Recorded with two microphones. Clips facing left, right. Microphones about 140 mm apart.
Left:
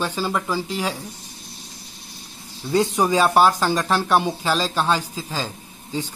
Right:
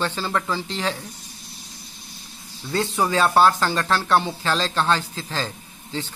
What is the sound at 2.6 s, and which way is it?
Speech, 15° left (ahead or behind).